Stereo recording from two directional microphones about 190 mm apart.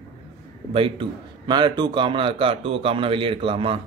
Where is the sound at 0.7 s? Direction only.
25° right (ahead or behind).